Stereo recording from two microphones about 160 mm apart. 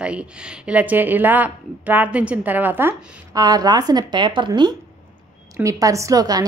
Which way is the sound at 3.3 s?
25° right (ahead or behind).